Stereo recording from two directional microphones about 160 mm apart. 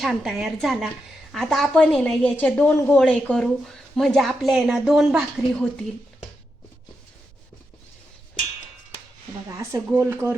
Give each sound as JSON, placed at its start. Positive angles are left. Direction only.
{"t": 0.0, "sound": "a woman's voice", "side_deg": 0}
{"t": 9.5, "sound": "speech", "side_deg": -20}